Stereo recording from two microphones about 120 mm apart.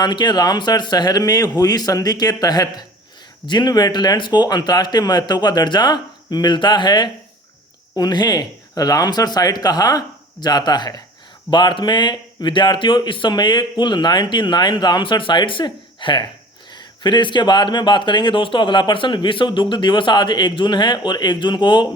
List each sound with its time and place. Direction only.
0.0 s speech: 35° left (ahead or behind)